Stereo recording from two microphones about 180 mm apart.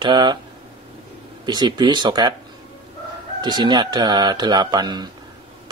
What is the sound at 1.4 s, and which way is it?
Speech, 25° right (ahead or behind).